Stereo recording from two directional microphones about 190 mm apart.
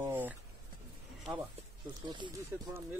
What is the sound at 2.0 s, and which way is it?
Speech, 25° right (ahead or behind).